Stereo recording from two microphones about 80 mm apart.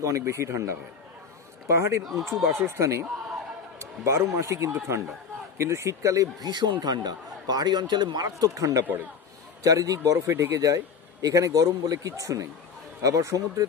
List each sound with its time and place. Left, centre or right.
0.0 s a man's voice: right
2.3 s speech: centre
2.7 s a man's voice: right
6.4 s a man's voice: right
8.8 s a man's voice: right
9.6 s a man's voice: right